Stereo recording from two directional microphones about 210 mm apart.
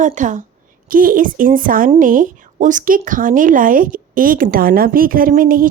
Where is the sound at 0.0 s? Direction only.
35° right (ahead or behind).